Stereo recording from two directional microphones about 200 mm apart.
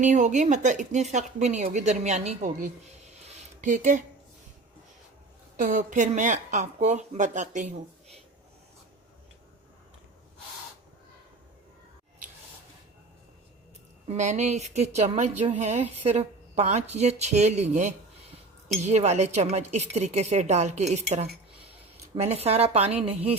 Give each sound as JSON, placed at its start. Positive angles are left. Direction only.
{"t": 0.0, "sound": "speech", "side_deg": -35}
{"t": 3.2, "sound": "a sound", "side_deg": -40}
{"t": 5.5, "sound": "speech", "side_deg": -40}
{"t": 14.1, "sound": "speech", "side_deg": -35}